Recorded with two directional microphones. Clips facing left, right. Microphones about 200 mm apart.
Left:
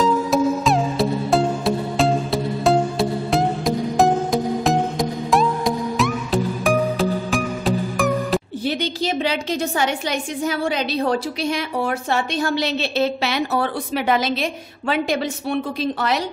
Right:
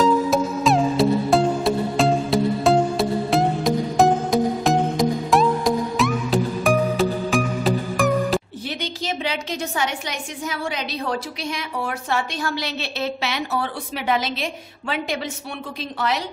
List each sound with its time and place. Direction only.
0.0 s music: centre (ahead or behind)
8.6 s a woman's voice: 35° left (ahead or behind)